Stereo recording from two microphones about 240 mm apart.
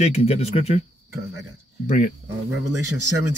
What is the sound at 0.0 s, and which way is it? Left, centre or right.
Speech, left.